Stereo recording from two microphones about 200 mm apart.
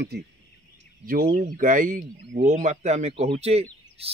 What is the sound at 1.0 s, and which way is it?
Speech, 45° right (ahead or behind).